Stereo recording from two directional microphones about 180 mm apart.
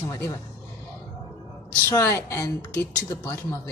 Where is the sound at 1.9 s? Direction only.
15° left (ahead or behind).